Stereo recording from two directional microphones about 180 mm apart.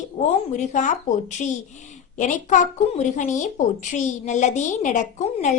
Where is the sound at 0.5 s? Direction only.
45° left (ahead or behind).